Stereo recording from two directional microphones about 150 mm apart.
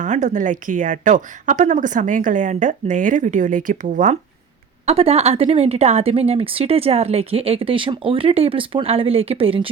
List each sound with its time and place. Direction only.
0.0 s a woman's voice: 55° right (ahead or behind)
4.9 s speech: 40° right (ahead or behind)